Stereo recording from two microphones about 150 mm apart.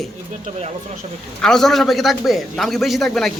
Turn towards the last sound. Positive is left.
turn(degrees=0)  # may be behind; listen again after turning